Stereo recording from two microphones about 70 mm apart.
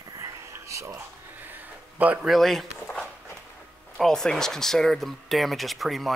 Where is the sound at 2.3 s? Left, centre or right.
Centre.